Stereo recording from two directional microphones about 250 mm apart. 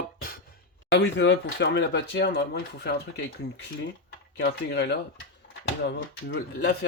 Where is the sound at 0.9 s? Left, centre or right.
Left.